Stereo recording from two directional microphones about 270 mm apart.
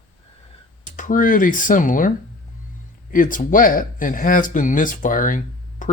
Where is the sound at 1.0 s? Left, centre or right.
Left.